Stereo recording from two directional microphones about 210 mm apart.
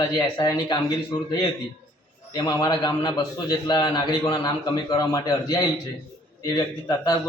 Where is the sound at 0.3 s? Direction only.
20° left (ahead or behind).